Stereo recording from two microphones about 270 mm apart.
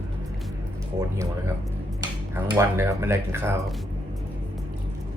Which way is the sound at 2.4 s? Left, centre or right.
Centre.